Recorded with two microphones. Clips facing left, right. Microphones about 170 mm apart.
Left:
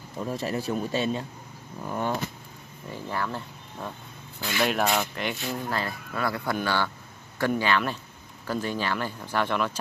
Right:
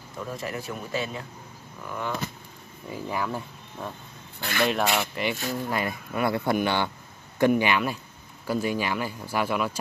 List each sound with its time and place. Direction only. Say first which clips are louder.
0.3 s speech: left 5 dB; 30° left (ahead or behind)
2.9 s speech: right 2 dB; 10° right (ahead or behind)
4.4 s speech: right 1 dB; 55° right (ahead or behind)
4.9 s speech: right 1 dB; 5° right (ahead or behind)
5.7 s speech: right 2 dB; 15° right (ahead or behind)